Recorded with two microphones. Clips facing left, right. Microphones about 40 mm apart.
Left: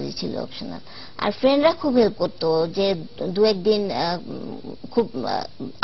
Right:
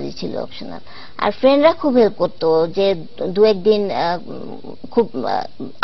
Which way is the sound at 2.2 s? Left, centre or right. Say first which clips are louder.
Right 5 dB; centre.